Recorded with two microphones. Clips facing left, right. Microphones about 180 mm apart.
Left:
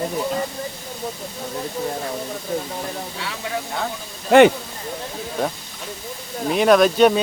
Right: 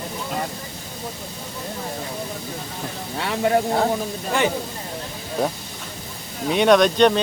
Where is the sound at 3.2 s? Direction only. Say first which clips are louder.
Right 13 dB; 55° right (ahead or behind).